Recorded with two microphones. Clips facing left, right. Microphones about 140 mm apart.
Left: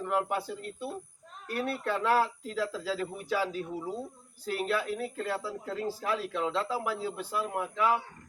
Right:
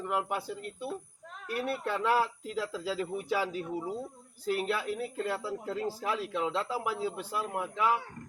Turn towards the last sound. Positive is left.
turn(degrees=-15)  # may be behind; listen again after turning